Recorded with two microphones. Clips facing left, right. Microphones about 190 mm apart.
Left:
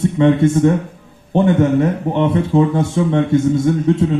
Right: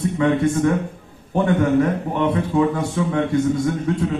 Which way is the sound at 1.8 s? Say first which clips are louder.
Left 3 dB; 25° left (ahead or behind).